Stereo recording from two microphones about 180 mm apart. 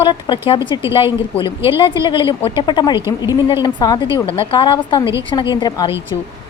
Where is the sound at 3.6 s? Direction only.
25° left (ahead or behind).